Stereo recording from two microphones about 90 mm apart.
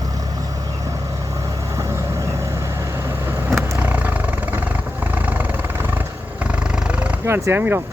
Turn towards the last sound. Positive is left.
turn(degrees=-25)  # may be behind; listen again after turning